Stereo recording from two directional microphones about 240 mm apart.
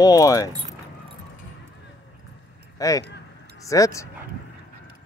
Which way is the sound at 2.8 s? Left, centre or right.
Centre.